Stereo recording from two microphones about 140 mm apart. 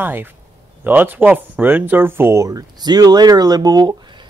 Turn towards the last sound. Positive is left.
turn(degrees=-30)  # may be behind; listen again after turning